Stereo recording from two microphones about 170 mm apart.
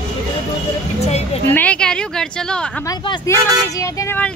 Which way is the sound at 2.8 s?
25° left (ahead or behind).